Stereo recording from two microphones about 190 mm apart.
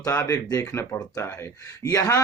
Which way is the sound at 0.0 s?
15° left (ahead or behind).